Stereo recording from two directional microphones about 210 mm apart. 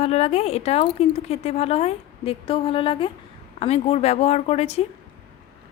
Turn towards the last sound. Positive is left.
turn(degrees=30)  # may be behind; listen again after turning